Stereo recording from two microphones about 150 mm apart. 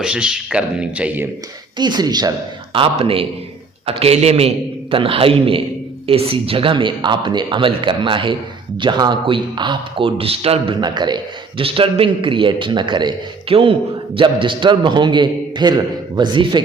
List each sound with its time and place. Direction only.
0.0 s a man's voice: 5° right (ahead or behind)
1.8 s speech: 30° right (ahead or behind)
2.7 s a man's voice: 40° right (ahead or behind)
10.8 s a man's voice: 30° right (ahead or behind)